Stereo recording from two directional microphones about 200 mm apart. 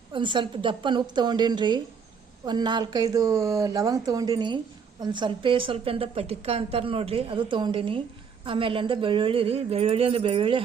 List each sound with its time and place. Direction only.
0.1 s speech: 25° right (ahead or behind)